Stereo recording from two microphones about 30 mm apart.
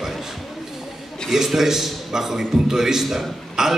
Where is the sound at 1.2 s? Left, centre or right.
Left.